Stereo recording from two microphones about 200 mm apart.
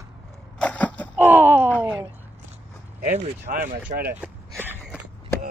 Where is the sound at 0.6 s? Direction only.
5° left (ahead or behind).